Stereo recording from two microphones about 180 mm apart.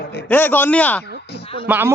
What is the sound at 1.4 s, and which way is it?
Music, 30° left (ahead or behind).